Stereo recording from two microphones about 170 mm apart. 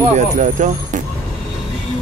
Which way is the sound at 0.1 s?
45° right (ahead or behind).